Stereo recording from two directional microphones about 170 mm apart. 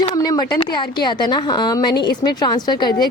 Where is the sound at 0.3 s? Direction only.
25° left (ahead or behind).